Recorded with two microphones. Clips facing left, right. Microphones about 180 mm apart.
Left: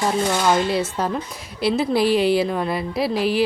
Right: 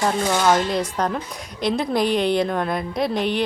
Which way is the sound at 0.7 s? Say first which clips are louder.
Left 1 dB; 5° left (ahead or behind).